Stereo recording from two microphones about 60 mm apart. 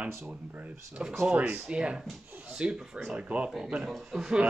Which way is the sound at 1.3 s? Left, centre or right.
Right.